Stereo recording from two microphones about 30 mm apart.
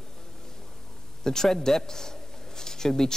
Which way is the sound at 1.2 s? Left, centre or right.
Centre.